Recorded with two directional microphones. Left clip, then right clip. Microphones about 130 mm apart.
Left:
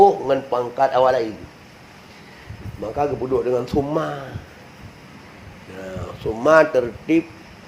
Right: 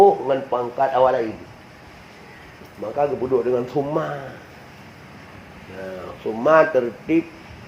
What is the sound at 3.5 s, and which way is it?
Speech, 80° left.